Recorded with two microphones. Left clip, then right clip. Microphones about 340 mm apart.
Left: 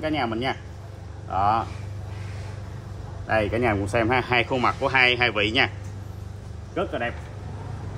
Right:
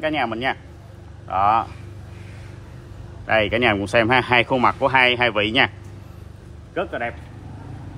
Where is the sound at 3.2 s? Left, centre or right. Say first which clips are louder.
Right 5 dB; right.